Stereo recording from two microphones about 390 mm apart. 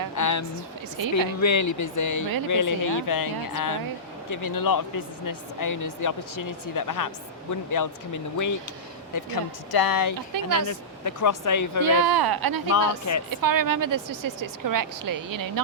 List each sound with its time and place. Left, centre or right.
0.2 s a sound: left
1.1 s speech: left
9.1 s speech: left
10.2 s speech: right
10.7 s speech: left
11.8 s speech: right
12.7 s speech: left
13.3 s speech: right